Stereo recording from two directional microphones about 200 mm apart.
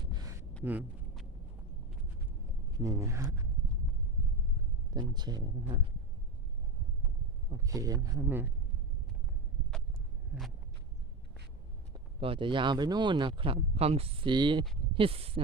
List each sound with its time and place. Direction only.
0.1 s a sound: 20° right (ahead or behind)
0.6 s speech: 10° right (ahead or behind)
2.7 s speech: 15° right (ahead or behind)
4.9 s speech: 20° right (ahead or behind)
7.5 s speech: 15° right (ahead or behind)
12.2 s speech: 25° right (ahead or behind)